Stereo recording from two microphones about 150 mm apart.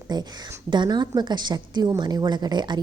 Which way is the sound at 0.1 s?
30° right (ahead or behind).